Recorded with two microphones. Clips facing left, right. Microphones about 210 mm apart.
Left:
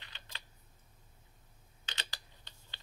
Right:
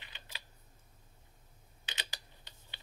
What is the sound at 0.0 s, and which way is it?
Typing, 15° right (ahead or behind).